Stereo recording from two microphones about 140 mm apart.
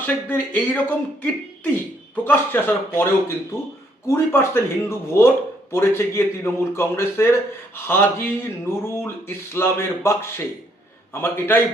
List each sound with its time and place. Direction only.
0.0 s speech: 10° left (ahead or behind)